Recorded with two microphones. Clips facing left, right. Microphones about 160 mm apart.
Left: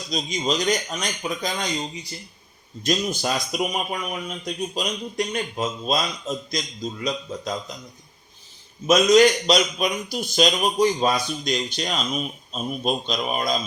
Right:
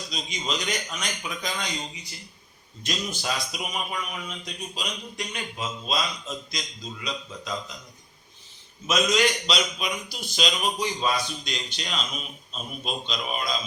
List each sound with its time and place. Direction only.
0.1 s a man's voice: 40° left (ahead or behind)
8.9 s a man's voice: 40° left (ahead or behind)